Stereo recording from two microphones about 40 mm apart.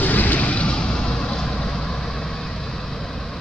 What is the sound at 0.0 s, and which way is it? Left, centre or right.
Vehicle, left.